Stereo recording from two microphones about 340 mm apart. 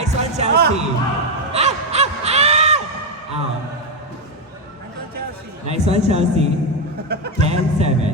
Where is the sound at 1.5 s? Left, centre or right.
Centre.